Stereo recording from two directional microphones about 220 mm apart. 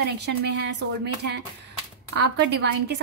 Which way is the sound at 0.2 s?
50° right (ahead or behind).